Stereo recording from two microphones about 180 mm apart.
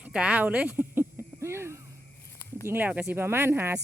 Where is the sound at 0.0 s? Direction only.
5° right (ahead or behind).